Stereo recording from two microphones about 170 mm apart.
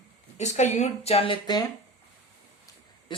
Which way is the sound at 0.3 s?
45° left (ahead or behind).